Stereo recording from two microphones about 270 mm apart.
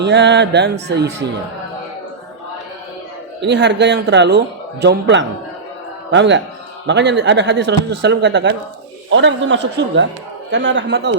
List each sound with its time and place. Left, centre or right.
0.0 s a man's voice: right
3.4 s a man's voice: right